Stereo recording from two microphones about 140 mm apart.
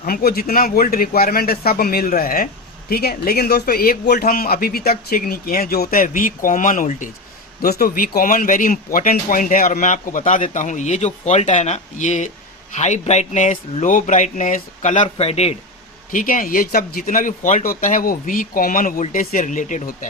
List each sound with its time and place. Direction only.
0.0 s speech: 90° left; by 7.1 s 70° left (ahead or behind)
7.6 s speech: 90° left; by 15.0 s 60° left (ahead or behind)
15.0 s a man's voice: 45° left (ahead or behind)
16.1 s speech: 75° left (ahead or behind)